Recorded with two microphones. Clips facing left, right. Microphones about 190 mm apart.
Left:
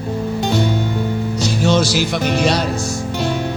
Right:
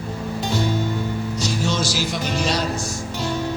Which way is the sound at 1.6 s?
65° left (ahead or behind).